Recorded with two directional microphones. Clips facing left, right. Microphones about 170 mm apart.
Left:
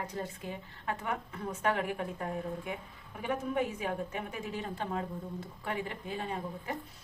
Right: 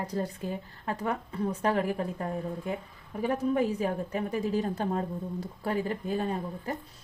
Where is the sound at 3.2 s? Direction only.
35° right (ahead or behind).